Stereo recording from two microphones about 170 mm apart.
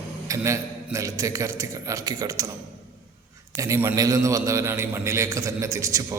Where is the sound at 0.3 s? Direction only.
15° right (ahead or behind).